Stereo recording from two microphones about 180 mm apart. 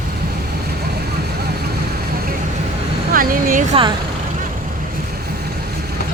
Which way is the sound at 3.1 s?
50° right (ahead or behind).